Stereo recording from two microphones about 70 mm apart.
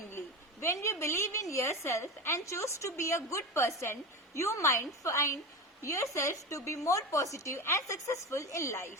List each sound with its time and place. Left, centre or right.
0.6 s a woman's voice: left